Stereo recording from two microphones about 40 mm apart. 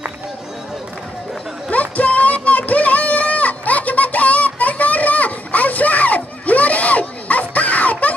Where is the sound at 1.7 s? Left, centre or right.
Left.